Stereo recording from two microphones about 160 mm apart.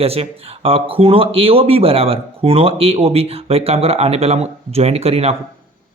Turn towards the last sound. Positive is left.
turn(degrees=-40)  # may be behind; listen again after turning